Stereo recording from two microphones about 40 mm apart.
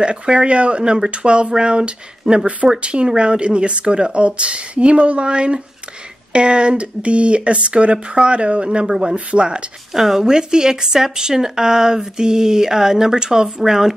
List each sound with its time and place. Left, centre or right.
0.0 s speech: right
8.6 s speech: centre
9.1 s speech: right
9.9 s speech: centre